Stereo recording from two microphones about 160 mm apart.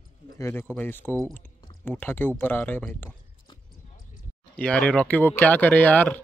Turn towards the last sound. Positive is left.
turn(degrees=10)  # may be behind; listen again after turning